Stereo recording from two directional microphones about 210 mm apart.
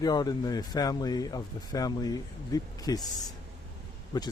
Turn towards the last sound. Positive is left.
turn(degrees=20)  # may be behind; listen again after turning